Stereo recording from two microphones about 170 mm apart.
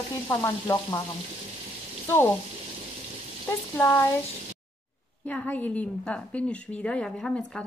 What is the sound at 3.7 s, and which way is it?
Speech, 15° left (ahead or behind).